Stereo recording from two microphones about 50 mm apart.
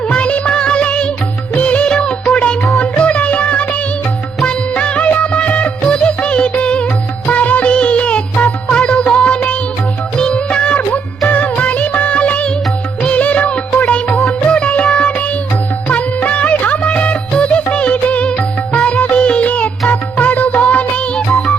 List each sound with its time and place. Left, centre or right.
0.1 s music: left
1.5 s music of bollywood: left
3.0 s music: left